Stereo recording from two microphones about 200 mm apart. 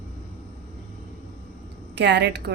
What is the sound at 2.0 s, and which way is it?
Speech, 60° right (ahead or behind).